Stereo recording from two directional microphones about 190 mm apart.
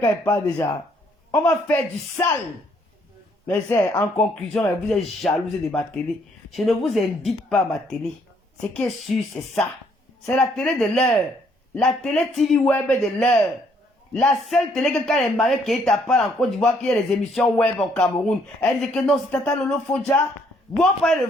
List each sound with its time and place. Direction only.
0.0 s a man's voice: 15° left (ahead or behind)
3.4 s a man's voice: 10° left (ahead or behind)
6.5 s speech: centre (ahead or behind)